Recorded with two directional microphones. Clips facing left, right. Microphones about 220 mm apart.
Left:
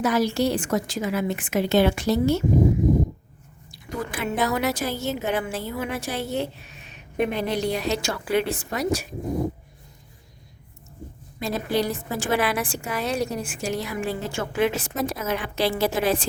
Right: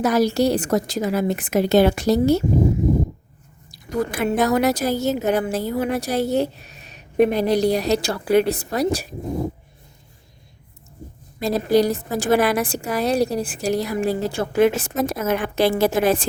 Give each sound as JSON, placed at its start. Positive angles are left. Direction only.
{"t": 0.0, "sound": "a woman's voice", "side_deg": -40}
{"t": 3.7, "sound": "a woman's voice", "side_deg": -40}
{"t": 11.3, "sound": "a woman's voice", "side_deg": -40}